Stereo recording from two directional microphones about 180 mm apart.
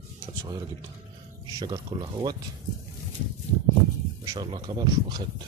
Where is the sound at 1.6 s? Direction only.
20° right (ahead or behind).